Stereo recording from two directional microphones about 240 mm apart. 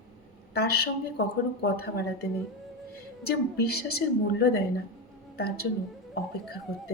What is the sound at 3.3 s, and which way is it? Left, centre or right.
A woman's voice, left.